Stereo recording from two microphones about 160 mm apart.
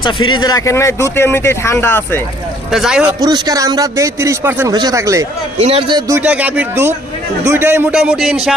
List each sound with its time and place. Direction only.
0.0 s speech: 30° left (ahead or behind)
2.7 s speech: 5° right (ahead or behind)
3.2 s speech: 25° right (ahead or behind)
5.5 s a man's voice: 40° right (ahead or behind)
6.1 s speech: 15° right (ahead or behind)